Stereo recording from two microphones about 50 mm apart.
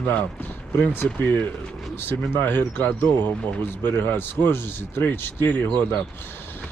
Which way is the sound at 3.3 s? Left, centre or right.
Left.